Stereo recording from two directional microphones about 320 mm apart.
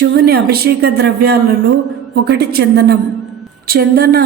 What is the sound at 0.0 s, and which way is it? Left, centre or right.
Speech, right.